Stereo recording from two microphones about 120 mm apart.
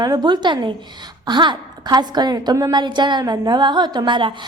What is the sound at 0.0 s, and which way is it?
A woman's voice, 35° right (ahead or behind).